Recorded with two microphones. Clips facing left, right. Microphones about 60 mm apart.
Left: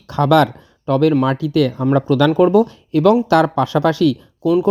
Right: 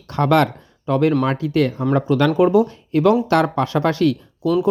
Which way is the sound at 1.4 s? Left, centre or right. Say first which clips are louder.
Left 3 dB; left.